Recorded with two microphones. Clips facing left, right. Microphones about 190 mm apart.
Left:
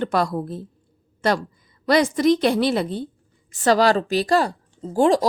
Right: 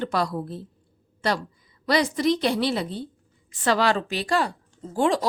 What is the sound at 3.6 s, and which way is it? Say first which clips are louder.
Speech: left 5 dB; 40° left (ahead or behind).